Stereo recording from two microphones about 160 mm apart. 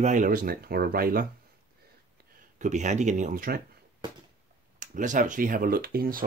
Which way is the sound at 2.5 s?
50° right (ahead or behind).